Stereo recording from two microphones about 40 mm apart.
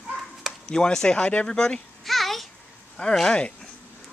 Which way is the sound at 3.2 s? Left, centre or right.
Left.